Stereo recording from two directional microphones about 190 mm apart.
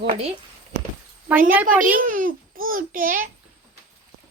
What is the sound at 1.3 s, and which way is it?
Speech, 10° right (ahead or behind).